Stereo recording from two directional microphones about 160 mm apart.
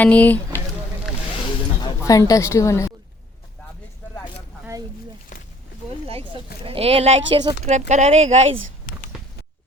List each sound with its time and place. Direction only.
0.0 s speech: 10° left (ahead or behind)
1.8 s a woman's voice: 20° left (ahead or behind)
6.1 s speech: 35° right (ahead or behind)